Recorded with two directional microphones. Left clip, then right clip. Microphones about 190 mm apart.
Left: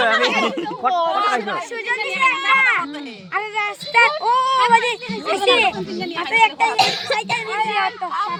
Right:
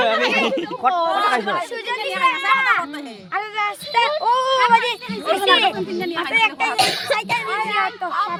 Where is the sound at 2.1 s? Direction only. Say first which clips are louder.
Even; 40° right (ahead or behind).